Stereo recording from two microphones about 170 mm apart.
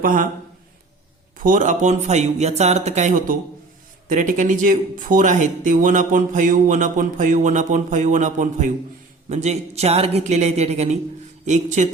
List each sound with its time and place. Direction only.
0.0 s speech: 55° right (ahead or behind)
1.4 s speech: 50° right (ahead or behind)